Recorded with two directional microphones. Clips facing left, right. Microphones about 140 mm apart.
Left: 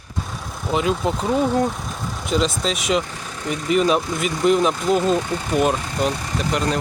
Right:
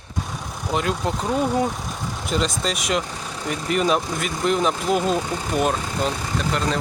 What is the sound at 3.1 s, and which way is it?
Vehicle, 10° right (ahead or behind).